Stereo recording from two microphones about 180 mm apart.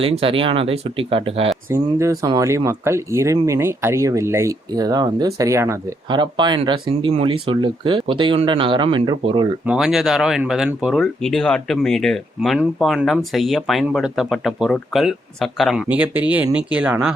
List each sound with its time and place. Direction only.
0.0 s speech: 30° right (ahead or behind)
1.7 s speech: 15° right (ahead or behind)
6.1 s speech: 25° right (ahead or behind)
9.6 s speech: 5° right (ahead or behind)